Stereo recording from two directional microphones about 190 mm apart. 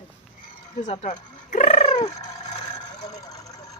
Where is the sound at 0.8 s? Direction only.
40° left (ahead or behind).